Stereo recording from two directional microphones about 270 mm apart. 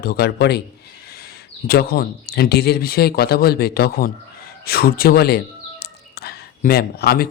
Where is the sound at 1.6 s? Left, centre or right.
Left.